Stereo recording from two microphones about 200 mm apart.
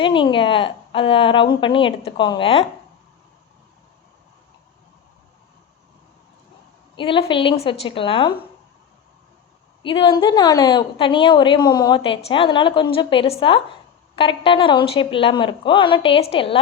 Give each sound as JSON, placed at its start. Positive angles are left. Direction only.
{"t": 0.0, "sound": "a woman's voice", "side_deg": 25}
{"t": 6.9, "sound": "a woman's voice", "side_deg": 25}
{"t": 9.8, "sound": "a woman's voice", "side_deg": 25}